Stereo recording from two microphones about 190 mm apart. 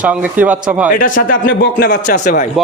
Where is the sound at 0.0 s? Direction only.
5° right (ahead or behind).